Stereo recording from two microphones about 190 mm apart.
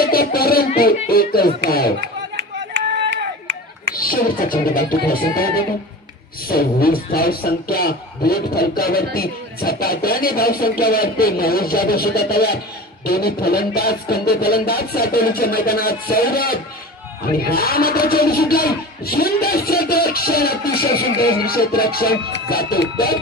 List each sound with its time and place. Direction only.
0.0 s music: 50° left (ahead or behind)
1.0 s speech: 50° left (ahead or behind)
3.9 s speech: 50° left (ahead or behind)
6.5 s speech: 50° left (ahead or behind)